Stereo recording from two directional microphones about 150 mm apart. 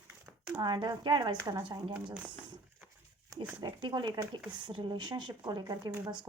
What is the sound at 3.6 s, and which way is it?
A woman's voice, 35° right (ahead or behind).